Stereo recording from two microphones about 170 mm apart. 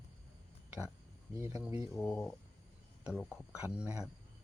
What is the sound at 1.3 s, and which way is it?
Speech, 15° right (ahead or behind).